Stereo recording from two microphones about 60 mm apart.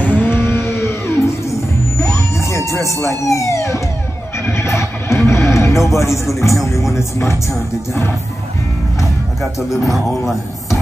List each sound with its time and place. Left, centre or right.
0.1 s music: left
3.2 s speech: left
4.4 s speech: left
9.8 s a man's voice: centre